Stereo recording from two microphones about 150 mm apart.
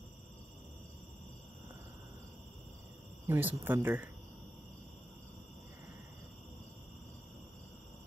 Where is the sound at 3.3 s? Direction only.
10° right (ahead or behind).